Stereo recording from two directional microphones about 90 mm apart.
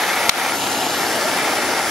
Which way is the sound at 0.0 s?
Centre (ahead or behind).